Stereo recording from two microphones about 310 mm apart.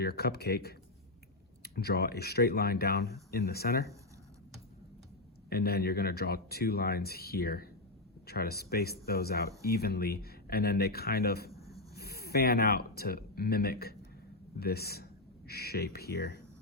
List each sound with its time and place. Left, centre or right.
0.0 s speech: left
5.5 s speech: left